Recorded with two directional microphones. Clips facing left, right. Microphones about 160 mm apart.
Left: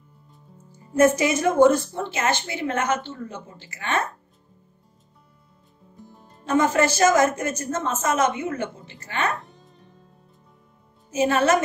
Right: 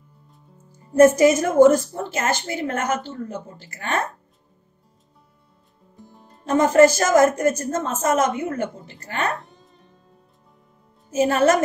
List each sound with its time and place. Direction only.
0.9 s a woman's voice: 45° right (ahead or behind)
6.4 s a woman's voice: 45° right (ahead or behind)
11.1 s a woman's voice: 45° right (ahead or behind)